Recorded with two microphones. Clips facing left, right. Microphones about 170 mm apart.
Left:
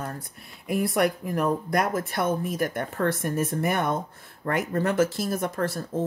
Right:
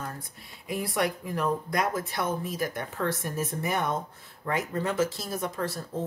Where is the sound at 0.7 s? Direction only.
55° left (ahead or behind).